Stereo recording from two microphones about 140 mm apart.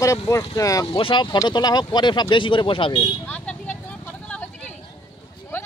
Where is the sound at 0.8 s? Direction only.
40° left (ahead or behind).